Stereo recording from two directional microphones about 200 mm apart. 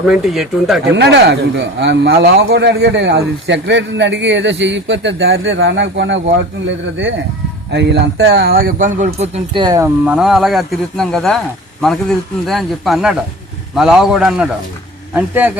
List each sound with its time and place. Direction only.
0.1 s speech: centre (ahead or behind)
0.9 s speech: 55° right (ahead or behind); by 9.6 s 30° right (ahead or behind)
9.6 s a man's voice: 15° right (ahead or behind)